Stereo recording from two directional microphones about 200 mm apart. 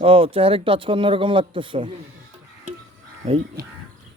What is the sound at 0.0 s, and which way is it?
Speech, 30° right (ahead or behind).